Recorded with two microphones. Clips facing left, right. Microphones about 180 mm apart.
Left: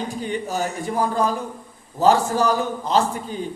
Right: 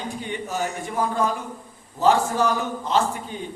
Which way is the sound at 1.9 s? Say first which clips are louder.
Left 2 dB; 40° left (ahead or behind).